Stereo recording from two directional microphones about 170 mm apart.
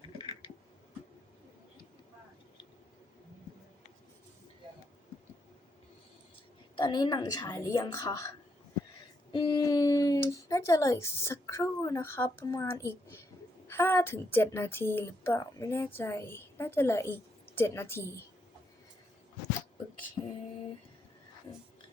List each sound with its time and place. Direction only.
0.2 s computer keyboard: 30° left (ahead or behind)
6.7 s a woman's voice: 25° left (ahead or behind)
9.3 s a woman's voice: 25° left (ahead or behind)
20.2 s a sound: 30° left (ahead or behind)